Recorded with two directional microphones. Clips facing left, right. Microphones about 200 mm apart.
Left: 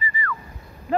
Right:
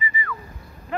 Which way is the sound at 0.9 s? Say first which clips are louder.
Left 6 dB; 35° left (ahead or behind).